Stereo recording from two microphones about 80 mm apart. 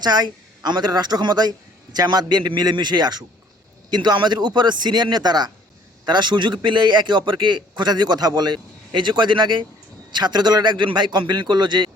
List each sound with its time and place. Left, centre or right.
0.0 s a man's voice: right
10.1 s a man's voice: right